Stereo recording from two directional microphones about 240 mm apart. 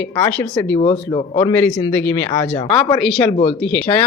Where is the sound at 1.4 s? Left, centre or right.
Centre.